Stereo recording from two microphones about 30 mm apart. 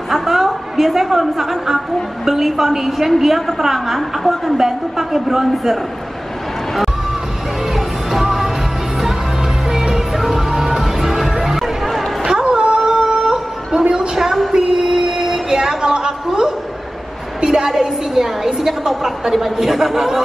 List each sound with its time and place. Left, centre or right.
0.1 s a sound: centre
1.0 s a woman's voice: centre
7.7 s music: centre
9.7 s music: centre
12.3 s a sound: right
17.6 s a woman's voice: centre